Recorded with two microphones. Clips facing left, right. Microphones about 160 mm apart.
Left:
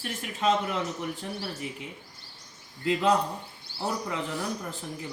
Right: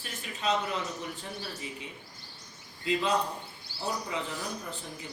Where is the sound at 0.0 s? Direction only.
90° left.